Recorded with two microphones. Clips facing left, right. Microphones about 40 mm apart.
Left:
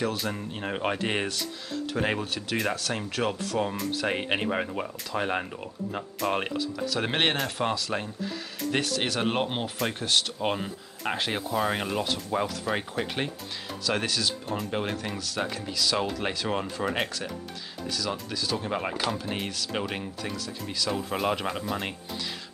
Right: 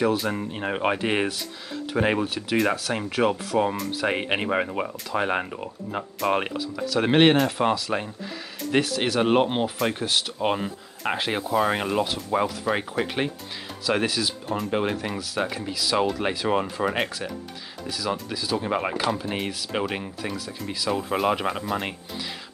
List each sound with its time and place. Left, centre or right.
0.0 s speech: centre